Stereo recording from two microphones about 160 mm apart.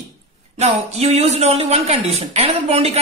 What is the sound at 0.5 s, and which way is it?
A man's voice, 40° right (ahead or behind).